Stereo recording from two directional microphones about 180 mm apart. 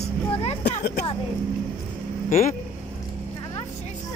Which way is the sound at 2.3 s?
45° left (ahead or behind).